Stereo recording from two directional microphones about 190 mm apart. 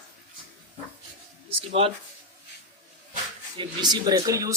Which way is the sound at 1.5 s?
30° right (ahead or behind).